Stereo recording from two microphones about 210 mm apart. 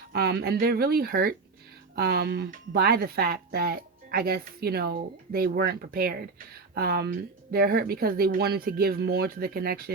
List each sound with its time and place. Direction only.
0.1 s speech: 50° right (ahead or behind)